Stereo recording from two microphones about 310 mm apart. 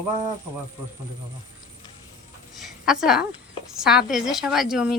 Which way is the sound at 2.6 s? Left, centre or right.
Centre.